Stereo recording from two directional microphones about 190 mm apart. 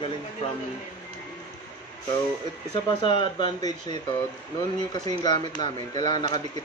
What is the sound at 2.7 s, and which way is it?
Speech, 25° left (ahead or behind).